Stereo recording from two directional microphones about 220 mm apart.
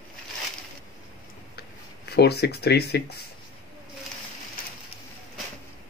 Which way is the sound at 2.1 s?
45° left (ahead or behind).